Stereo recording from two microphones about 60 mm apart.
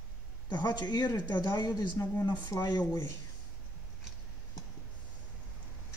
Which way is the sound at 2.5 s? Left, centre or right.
Left.